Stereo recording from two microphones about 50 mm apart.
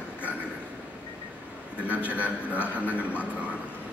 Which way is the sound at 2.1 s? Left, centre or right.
Right.